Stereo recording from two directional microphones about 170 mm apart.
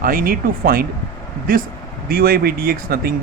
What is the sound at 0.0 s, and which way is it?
Speech, 55° right (ahead or behind).